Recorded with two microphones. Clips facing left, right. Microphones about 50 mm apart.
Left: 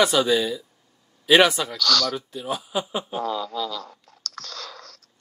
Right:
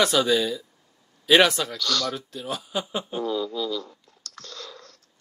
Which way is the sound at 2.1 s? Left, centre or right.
Centre.